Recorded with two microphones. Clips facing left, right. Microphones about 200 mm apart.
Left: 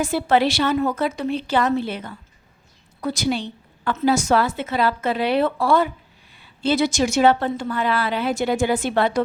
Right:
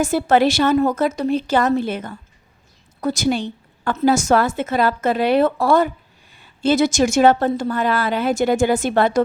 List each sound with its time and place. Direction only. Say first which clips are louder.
0.0 s a woman's voice: right 3 dB; 45° right (ahead or behind)